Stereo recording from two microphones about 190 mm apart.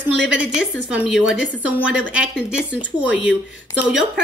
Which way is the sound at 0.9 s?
5° right (ahead or behind).